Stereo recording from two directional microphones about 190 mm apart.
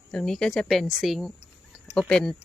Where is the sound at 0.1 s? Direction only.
5° left (ahead or behind).